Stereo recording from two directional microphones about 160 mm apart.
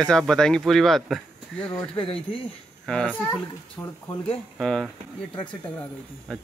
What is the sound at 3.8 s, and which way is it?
Speech, 20° left (ahead or behind).